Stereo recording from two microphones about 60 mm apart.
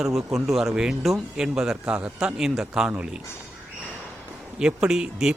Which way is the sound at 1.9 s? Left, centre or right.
Right.